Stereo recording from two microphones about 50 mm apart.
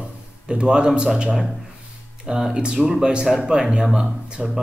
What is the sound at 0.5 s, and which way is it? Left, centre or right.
Speech, centre.